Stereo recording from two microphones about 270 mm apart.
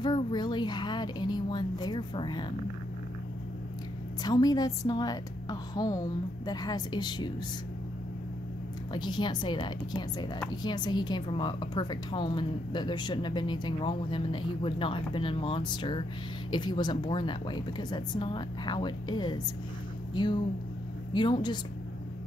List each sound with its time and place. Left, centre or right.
0.0 s a woman's voice: centre
4.2 s a woman's voice: centre
8.9 s a woman's voice: centre